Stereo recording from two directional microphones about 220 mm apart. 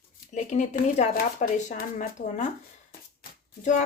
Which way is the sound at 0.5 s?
35° left (ahead or behind).